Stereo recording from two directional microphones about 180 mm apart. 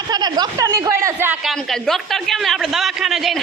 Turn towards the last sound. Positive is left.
turn(degrees=0)  # may be behind; listen again after turning